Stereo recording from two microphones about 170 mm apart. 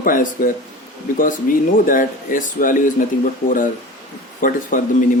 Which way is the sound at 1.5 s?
55° left (ahead or behind).